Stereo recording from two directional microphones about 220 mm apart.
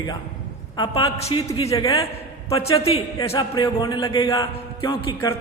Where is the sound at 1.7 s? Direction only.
15° left (ahead or behind).